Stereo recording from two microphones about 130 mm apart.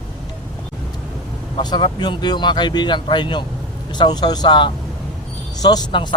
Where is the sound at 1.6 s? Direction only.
35° left (ahead or behind).